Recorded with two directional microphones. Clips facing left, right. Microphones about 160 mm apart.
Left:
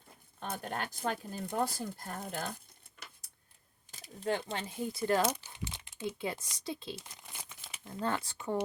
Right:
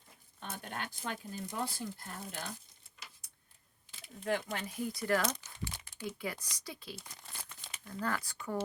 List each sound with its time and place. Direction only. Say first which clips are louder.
0.3 s speech: left 5 dB; 50° left (ahead or behind)
3.9 s a sound: left 2 dB; 40° left (ahead or behind)
4.3 s speech: left 1 dB; 30° left (ahead or behind)
7.2 s crumpling: left 1 dB; 15° left (ahead or behind)
7.9 s speech: left 2 dB; 25° left (ahead or behind)